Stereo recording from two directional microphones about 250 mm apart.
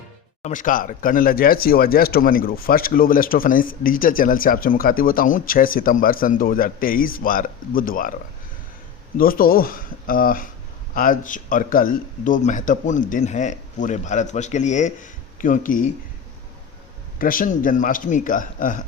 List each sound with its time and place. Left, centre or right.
0.4 s speech: left
9.1 s speech: left
17.2 s speech: left